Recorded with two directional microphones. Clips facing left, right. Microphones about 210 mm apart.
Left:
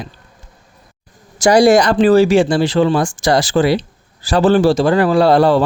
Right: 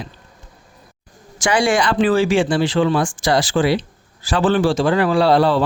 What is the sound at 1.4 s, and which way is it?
Speech, 40° left (ahead or behind).